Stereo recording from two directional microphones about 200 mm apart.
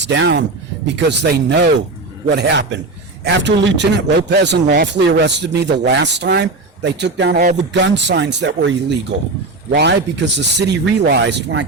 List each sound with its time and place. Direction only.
0.0 s a man's voice: 60° right (ahead or behind)